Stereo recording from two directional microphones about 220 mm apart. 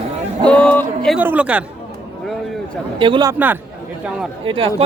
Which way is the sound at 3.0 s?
20° right (ahead or behind).